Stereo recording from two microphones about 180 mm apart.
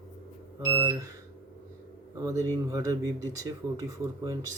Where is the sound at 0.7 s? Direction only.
30° right (ahead or behind).